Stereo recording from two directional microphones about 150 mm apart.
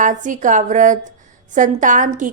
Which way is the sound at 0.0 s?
55° right (ahead or behind).